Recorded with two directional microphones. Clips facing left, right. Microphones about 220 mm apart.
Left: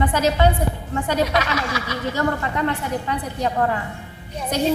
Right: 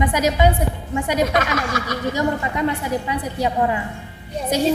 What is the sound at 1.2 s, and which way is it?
Snicker, 50° right (ahead or behind).